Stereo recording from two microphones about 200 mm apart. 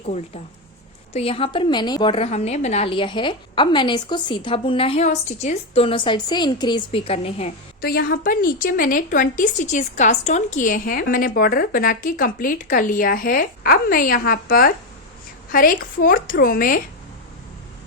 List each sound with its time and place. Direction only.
0.0 s a woman's voice: 35° left (ahead or behind)
7.8 s a woman's voice: 50° left (ahead or behind)